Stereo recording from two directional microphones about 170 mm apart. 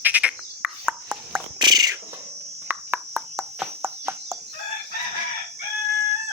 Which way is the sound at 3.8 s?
15° right (ahead or behind).